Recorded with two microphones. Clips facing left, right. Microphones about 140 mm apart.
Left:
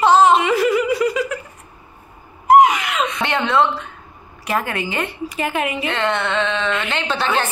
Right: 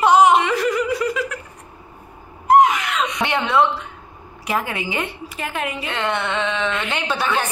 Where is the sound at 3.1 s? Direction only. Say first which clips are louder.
Even; 15° right (ahead or behind).